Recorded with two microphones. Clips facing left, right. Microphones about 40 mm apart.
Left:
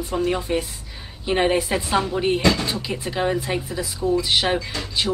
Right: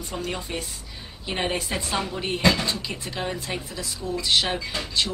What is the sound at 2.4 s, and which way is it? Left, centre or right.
Speech, centre.